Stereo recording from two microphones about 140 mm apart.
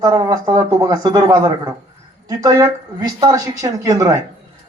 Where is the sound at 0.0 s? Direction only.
25° right (ahead or behind).